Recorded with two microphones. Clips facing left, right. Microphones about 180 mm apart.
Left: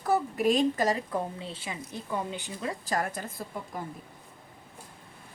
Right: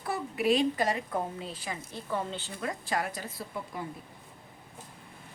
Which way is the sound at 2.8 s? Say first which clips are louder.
Left 3 dB; 45° left (ahead or behind).